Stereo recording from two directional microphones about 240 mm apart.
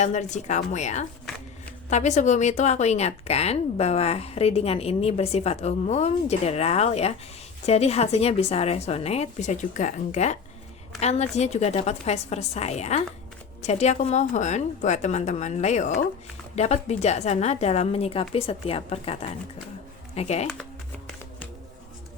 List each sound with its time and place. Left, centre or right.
0.0 s speech: left
20.1 s speech: left